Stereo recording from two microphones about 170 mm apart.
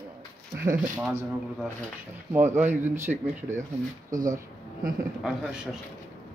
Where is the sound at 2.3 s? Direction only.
15° right (ahead or behind).